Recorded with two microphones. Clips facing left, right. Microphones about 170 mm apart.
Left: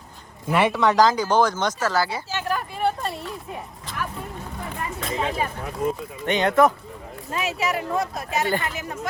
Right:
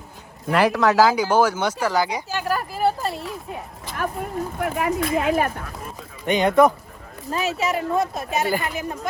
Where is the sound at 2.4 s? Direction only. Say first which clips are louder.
Right 3 dB; 5° right (ahead or behind).